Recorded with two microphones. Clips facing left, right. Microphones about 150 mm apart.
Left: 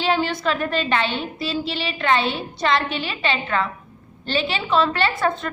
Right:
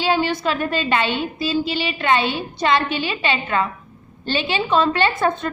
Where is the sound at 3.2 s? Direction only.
15° right (ahead or behind).